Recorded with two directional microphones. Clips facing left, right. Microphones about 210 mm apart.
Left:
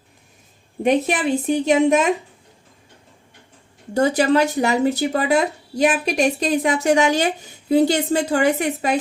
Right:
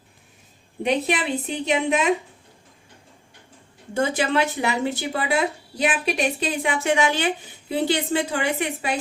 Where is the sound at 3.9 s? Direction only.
40° left (ahead or behind).